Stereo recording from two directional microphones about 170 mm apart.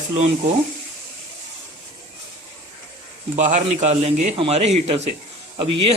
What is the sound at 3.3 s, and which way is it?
Speech, 45° right (ahead or behind).